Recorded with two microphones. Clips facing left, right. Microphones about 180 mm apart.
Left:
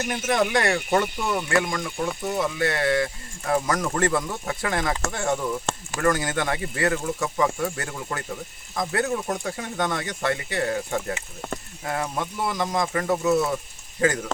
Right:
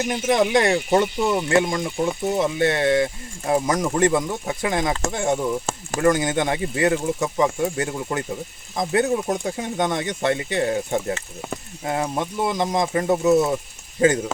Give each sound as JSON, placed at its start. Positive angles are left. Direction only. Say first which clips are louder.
{"t": 0.0, "sound": "speech", "louder": "right 4 dB", "side_deg": -20}